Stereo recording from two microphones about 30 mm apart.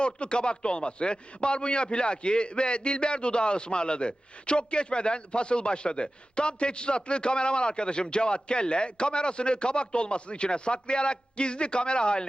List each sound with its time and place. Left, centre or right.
0.0 s a man's voice: left